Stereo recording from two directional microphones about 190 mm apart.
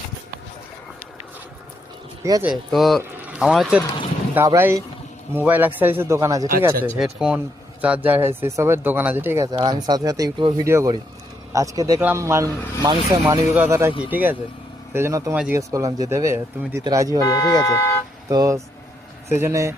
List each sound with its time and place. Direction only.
2.2 s speech: 20° right (ahead or behind)
2.5 s speech: centre (ahead or behind); by 6.5 s 15° right (ahead or behind)
7.0 s speech: 5° right (ahead or behind)
17.2 s speech: 20° left (ahead or behind)
18.3 s speech: 15° right (ahead or behind)